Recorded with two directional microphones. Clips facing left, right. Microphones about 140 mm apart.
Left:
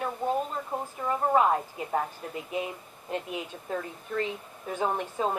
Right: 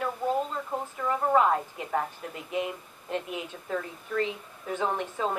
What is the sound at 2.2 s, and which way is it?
Speech, 35° left (ahead or behind).